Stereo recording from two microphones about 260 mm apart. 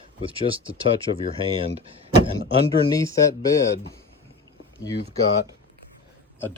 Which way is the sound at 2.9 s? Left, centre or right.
Centre.